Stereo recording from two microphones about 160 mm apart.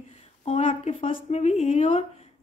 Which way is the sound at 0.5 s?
45° left (ahead or behind).